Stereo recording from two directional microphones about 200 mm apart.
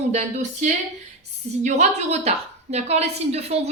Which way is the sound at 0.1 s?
35° right (ahead or behind).